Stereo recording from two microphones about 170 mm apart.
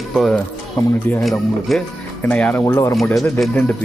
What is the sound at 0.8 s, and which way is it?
Speech, 20° left (ahead or behind).